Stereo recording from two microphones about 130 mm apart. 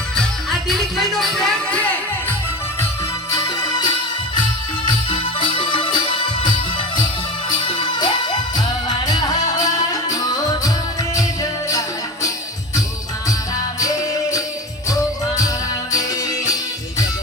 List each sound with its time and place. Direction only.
0.2 s music: centre (ahead or behind)
3.3 s music: 30° left (ahead or behind)
13.7 s music: 25° left (ahead or behind)